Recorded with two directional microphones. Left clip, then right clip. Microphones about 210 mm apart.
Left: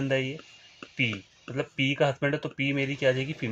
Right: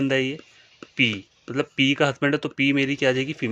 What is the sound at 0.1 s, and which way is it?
Speech, 40° right (ahead or behind).